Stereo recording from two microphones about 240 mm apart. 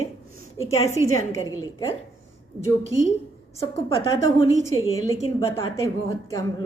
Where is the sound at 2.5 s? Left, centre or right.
Right.